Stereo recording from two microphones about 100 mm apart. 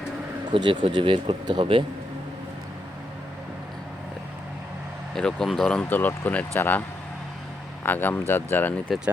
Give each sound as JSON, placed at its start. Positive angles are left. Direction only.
{"t": 0.5, "sound": "speech", "side_deg": -55}
{"t": 5.1, "sound": "speech", "side_deg": 5}
{"t": 5.6, "sound": "speech", "side_deg": 15}
{"t": 7.9, "sound": "speech", "side_deg": 20}